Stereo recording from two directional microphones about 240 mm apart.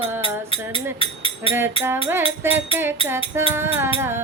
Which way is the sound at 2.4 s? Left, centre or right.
Centre.